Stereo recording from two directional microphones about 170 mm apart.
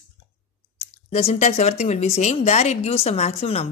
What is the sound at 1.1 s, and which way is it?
Speech, 40° left (ahead or behind).